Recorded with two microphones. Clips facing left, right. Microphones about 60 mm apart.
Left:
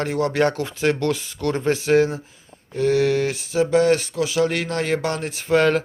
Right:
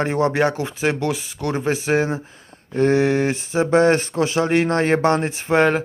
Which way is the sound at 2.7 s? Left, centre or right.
Right.